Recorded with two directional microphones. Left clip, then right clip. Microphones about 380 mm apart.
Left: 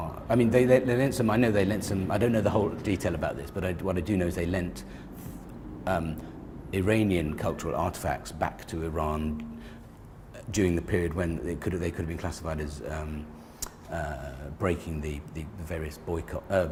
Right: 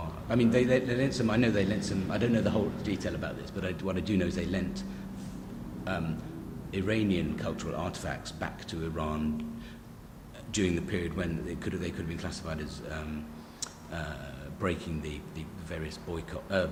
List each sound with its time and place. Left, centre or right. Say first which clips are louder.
0.3 s a man's voice: left 4 dB; centre
5.9 s speech: left 6 dB; left
10.5 s speech: left 4 dB; left
13.6 s a sound: left 5 dB; left
14.6 s speech: left 3 dB; centre